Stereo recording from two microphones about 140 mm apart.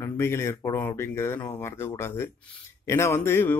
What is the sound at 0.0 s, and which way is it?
A man's voice, 20° left (ahead or behind).